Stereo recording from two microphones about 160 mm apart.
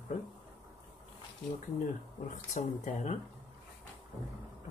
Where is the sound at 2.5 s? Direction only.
50° left (ahead or behind).